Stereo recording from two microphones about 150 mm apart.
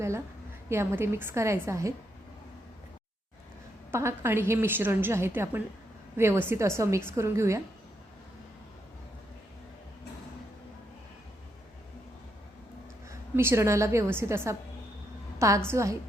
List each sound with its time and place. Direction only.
0.7 s a woman's voice: 15° right (ahead or behind)
3.9 s a woman's voice: 15° right (ahead or behind)
13.1 s a woman's voice: 15° right (ahead or behind)